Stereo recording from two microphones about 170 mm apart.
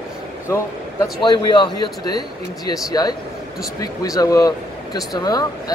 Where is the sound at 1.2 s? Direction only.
25° left (ahead or behind).